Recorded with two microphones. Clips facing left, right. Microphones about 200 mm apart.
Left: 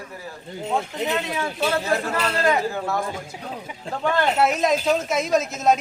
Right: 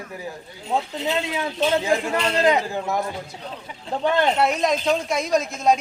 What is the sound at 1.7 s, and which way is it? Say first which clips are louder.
A man's voice: right 3 dB; 15° right (ahead or behind).